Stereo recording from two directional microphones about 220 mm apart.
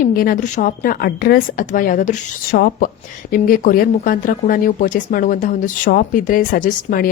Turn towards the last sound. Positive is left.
turn(degrees=40)  # may be behind; listen again after turning